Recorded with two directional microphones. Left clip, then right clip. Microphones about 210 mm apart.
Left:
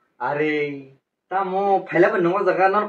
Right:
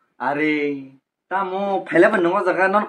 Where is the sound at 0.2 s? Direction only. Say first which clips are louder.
Right 1 dB; 50° right (ahead or behind).